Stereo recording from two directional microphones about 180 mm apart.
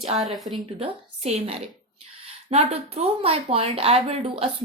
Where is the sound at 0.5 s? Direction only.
35° right (ahead or behind).